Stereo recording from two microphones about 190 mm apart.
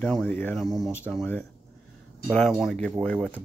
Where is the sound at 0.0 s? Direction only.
5° left (ahead or behind).